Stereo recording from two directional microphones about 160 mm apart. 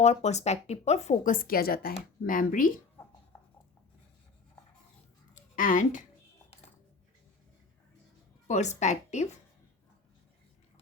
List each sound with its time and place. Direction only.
0.0 s a woman's voice: 45° left (ahead or behind); by 1.9 s 70° left (ahead or behind)
1.9 s speech: 60° left (ahead or behind)
5.3 s a sound: 55° left (ahead or behind)
8.4 s a woman's voice: 45° left (ahead or behind)